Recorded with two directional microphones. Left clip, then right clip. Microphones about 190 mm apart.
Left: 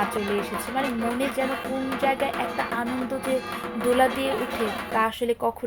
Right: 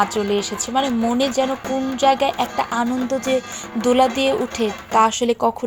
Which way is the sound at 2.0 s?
35° right (ahead or behind).